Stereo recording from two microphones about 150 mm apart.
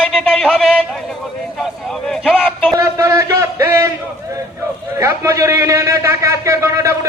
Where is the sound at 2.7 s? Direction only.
20° right (ahead or behind).